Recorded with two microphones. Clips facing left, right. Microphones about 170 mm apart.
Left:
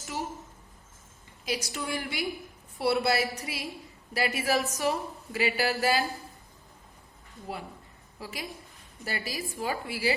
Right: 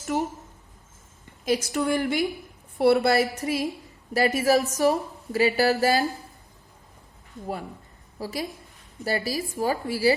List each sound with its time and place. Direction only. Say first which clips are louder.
0.1 s a sound: right 8 dB; 55° right (ahead or behind)
1.5 s a woman's voice: right 9 dB; 45° right (ahead or behind)
8.2 s a woman's voice: right 8 dB; 40° right (ahead or behind)